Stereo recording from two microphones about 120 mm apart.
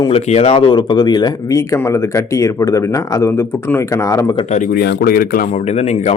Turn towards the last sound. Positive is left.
turn(degrees=65)  # may be behind; listen again after turning